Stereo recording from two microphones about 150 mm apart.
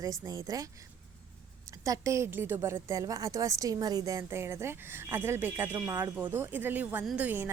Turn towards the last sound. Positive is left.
turn(degrees=-15)  # may be behind; listen again after turning